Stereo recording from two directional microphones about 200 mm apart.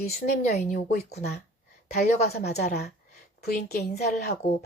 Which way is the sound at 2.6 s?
40° left (ahead or behind).